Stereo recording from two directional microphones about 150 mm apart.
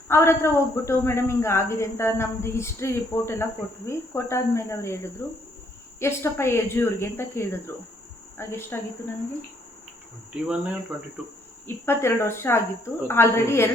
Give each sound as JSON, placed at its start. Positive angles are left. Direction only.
{"t": 0.1, "sound": "speech", "side_deg": 20}
{"t": 10.3, "sound": "cricket", "side_deg": -5}
{"t": 11.6, "sound": "speech", "side_deg": 15}